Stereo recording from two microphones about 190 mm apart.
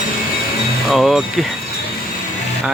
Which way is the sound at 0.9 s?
Centre (ahead or behind).